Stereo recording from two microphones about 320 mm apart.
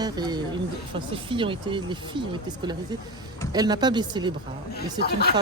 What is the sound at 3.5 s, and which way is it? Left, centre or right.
Speech, centre.